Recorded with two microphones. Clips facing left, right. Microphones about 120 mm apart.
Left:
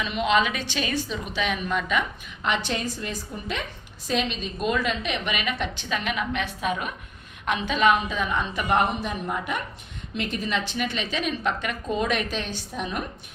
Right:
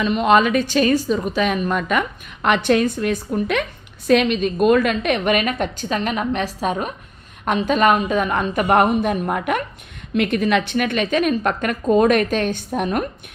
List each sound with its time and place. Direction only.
0.0 s a woman's voice: 45° right (ahead or behind)